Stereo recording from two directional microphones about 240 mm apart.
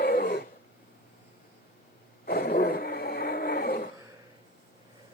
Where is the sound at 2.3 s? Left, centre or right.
Left.